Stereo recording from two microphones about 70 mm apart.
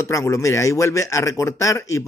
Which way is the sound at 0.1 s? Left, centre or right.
Left.